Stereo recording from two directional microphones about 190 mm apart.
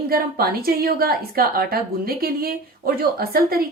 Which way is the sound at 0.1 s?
50° right (ahead or behind).